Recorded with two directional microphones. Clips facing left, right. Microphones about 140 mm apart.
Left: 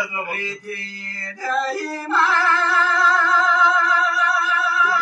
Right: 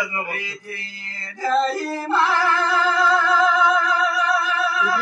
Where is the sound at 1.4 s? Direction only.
20° right (ahead or behind).